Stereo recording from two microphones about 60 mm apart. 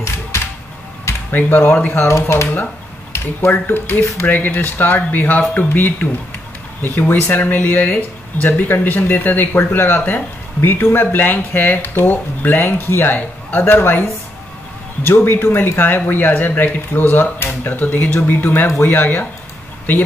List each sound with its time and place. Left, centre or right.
1.3 s speech: left
2.0 s speech: left
2.5 s speech: left
15.0 s speech: left